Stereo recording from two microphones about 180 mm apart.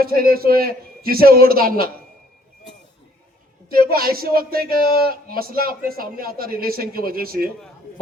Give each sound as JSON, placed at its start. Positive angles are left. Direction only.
{"t": 0.0, "sound": "speech", "side_deg": -55}
{"t": 3.7, "sound": "speech", "side_deg": -55}